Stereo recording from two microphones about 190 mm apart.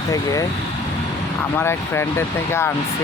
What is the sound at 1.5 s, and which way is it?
Speech, 15° left (ahead or behind).